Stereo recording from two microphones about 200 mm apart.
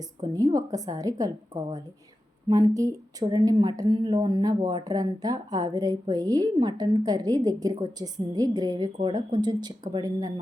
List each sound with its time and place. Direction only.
0.3 s a woman's voice: 15° right (ahead or behind)